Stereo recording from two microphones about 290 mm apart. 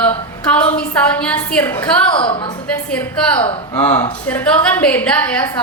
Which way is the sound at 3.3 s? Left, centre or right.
Centre.